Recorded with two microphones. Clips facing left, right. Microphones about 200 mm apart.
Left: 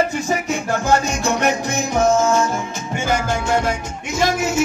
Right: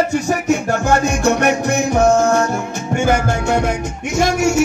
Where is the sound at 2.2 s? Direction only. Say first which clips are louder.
Right 2 dB; 65° right (ahead or behind).